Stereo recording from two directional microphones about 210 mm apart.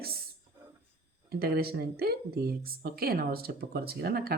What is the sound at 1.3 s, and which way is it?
A woman's voice, 50° right (ahead or behind).